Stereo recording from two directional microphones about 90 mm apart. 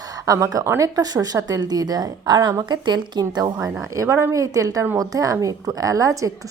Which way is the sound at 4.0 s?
35° right (ahead or behind).